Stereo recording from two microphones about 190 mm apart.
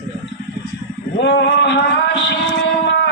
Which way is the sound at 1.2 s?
65° left (ahead or behind).